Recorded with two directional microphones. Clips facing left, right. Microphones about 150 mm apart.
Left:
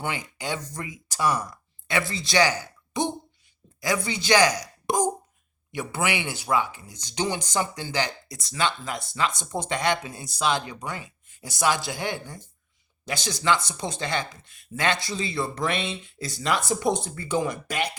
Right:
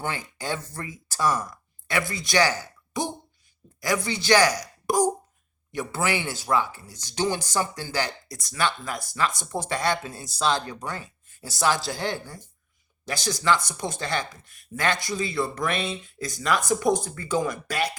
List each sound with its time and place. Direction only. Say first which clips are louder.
0.0 s speech: even; 15° left (ahead or behind)